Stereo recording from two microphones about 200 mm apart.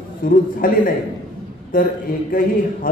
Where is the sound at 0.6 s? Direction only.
45° left (ahead or behind).